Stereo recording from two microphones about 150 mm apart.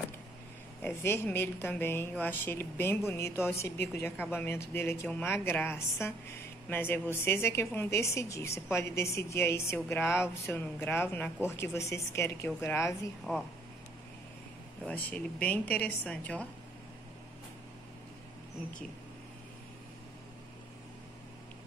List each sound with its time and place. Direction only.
0.8 s a woman's voice: 15° left (ahead or behind)
13.3 s speech: centre (ahead or behind)
15.0 s a woman's voice: 10° left (ahead or behind)